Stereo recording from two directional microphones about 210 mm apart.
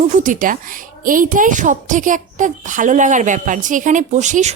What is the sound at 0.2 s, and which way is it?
A woman's voice, 40° right (ahead or behind).